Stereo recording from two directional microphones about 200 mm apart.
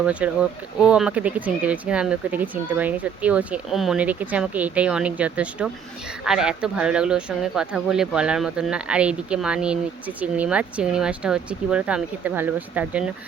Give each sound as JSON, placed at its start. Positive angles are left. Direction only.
{"t": 0.0, "sound": "speech", "side_deg": -5}